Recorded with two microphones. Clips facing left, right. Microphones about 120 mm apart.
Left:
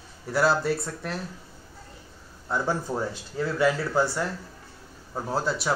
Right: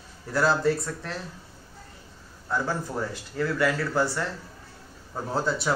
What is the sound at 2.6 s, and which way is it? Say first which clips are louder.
Speech: left 2 dB; 20° left (ahead or behind).